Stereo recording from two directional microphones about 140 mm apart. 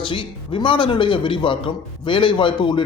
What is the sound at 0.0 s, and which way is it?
A man's voice, 40° left (ahead or behind).